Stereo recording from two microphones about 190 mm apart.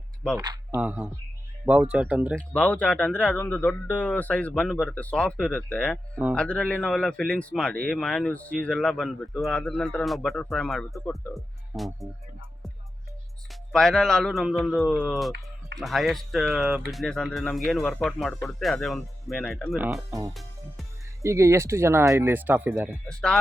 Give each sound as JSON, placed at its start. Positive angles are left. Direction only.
{"t": 0.3, "sound": "speech", "side_deg": -15}
{"t": 0.8, "sound": "speech", "side_deg": -5}
{"t": 2.3, "sound": "speech", "side_deg": 5}
{"t": 13.5, "sound": "speech", "side_deg": 5}
{"t": 20.3, "sound": "music", "side_deg": 0}
{"t": 21.2, "sound": "speech", "side_deg": -15}
{"t": 23.0, "sound": "speech", "side_deg": 5}